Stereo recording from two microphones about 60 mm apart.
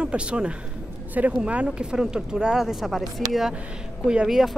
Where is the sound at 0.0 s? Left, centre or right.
Centre.